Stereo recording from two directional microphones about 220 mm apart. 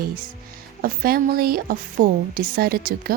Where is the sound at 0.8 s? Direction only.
40° right (ahead or behind).